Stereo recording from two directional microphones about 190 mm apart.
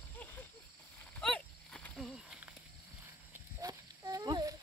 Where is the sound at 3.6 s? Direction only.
20° right (ahead or behind).